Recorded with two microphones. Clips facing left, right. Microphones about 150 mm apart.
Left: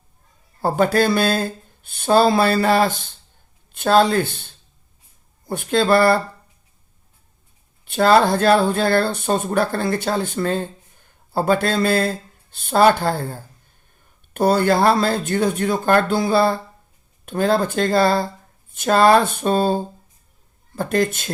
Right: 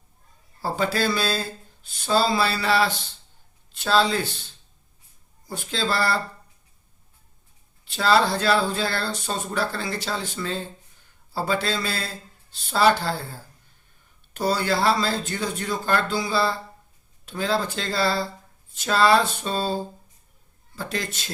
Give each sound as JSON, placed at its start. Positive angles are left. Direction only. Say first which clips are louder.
{"t": 0.6, "sound": "speech", "louder": "left 7 dB", "side_deg": 50}
{"t": 7.9, "sound": "speech", "louder": "left 6 dB", "side_deg": 55}